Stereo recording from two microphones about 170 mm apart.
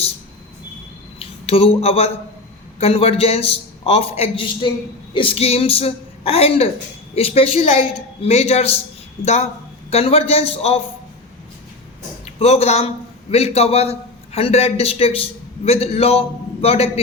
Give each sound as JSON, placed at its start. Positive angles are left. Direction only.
{"t": 1.2, "sound": "a man's voice", "side_deg": 35}
{"t": 12.2, "sound": "a man's voice", "side_deg": 35}